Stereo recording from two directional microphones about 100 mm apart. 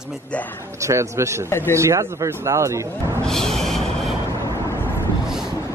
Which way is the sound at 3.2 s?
5° left (ahead or behind).